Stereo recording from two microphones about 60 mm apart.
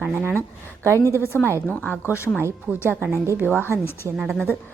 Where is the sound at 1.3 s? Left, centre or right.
Right.